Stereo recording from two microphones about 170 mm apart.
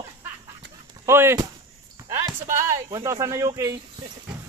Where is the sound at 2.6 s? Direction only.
20° right (ahead or behind).